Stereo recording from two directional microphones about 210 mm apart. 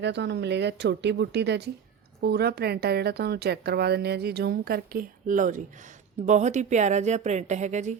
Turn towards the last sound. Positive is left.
turn(degrees=-35)  # may be behind; listen again after turning